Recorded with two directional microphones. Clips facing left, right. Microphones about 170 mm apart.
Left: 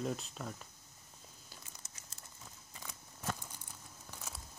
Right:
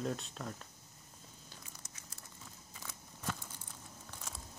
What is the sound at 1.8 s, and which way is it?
Crumpling, 25° left (ahead or behind).